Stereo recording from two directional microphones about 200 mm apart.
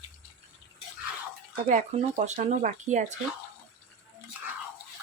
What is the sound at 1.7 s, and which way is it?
Speech, 35° right (ahead or behind).